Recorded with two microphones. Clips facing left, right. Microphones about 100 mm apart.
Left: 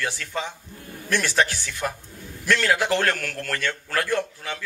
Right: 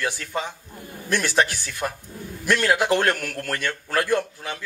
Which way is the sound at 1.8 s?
20° right (ahead or behind).